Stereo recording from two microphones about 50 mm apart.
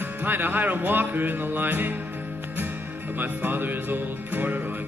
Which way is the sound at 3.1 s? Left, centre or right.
Right.